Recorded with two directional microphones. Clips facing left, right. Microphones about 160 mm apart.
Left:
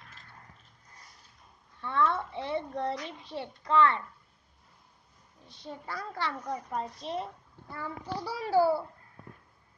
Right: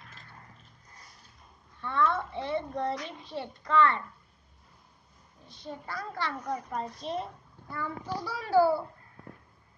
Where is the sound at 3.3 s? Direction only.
20° left (ahead or behind).